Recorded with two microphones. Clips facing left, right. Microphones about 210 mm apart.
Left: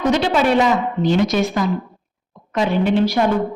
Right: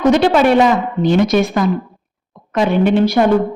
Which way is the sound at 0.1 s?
55° right (ahead or behind).